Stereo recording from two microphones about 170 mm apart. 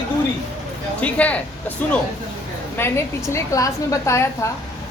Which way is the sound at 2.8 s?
15° left (ahead or behind).